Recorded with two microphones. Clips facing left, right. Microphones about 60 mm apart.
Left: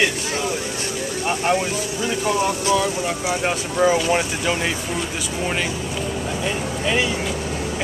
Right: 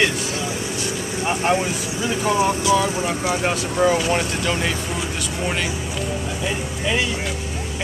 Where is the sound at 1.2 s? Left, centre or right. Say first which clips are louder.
Right 1 dB; centre.